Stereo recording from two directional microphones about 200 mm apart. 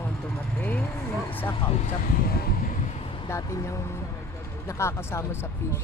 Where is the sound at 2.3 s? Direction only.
50° left (ahead or behind).